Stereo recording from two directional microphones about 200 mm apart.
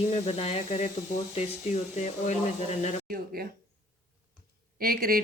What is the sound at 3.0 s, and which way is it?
Speech, 45° right (ahead or behind).